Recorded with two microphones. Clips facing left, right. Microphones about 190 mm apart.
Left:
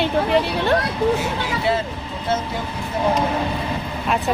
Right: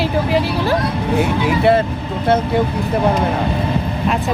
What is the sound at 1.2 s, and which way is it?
Speech, 60° right (ahead or behind).